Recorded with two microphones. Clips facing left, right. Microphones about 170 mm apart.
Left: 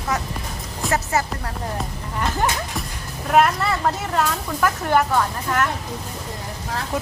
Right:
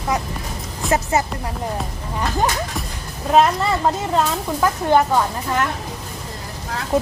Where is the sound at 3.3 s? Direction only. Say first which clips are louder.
Right 2 dB; 20° right (ahead or behind).